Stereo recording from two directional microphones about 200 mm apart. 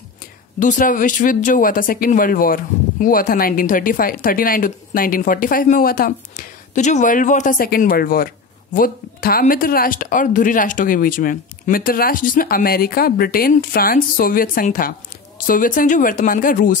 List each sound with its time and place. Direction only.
0.6 s a woman's voice: 40° left (ahead or behind)